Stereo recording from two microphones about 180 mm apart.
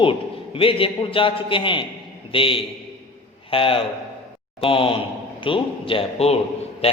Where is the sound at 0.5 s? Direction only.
30° left (ahead or behind).